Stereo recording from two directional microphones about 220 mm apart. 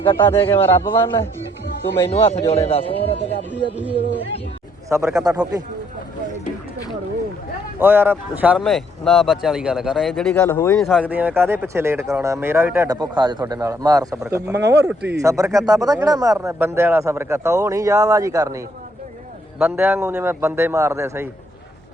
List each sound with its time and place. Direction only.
0.2 s a man's voice: 10° left (ahead or behind)
2.0 s speech: 25° left (ahead or behind)
4.9 s speech: 15° right (ahead or behind)
7.8 s speech: 10° right (ahead or behind); by 10.8 s 10° left (ahead or behind)
10.8 s speech: 5° right (ahead or behind)